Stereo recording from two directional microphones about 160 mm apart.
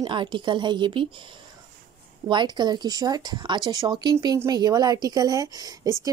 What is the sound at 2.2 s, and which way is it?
A woman's voice, 25° right (ahead or behind).